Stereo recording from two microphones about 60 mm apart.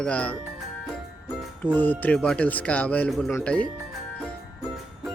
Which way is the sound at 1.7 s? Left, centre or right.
Left.